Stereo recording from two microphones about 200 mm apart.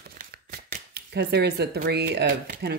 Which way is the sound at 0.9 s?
55° right (ahead or behind).